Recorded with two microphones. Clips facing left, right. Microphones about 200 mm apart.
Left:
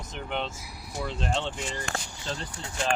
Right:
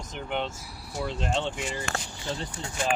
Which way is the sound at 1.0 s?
15° right (ahead or behind).